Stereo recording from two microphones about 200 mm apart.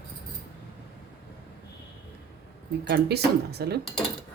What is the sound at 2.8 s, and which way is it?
Speech, 55° right (ahead or behind).